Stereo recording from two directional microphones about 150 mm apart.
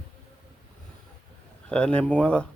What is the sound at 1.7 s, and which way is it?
Speech, 5° left (ahead or behind).